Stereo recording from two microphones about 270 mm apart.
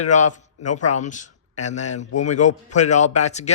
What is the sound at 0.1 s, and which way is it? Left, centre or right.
A man's voice, left.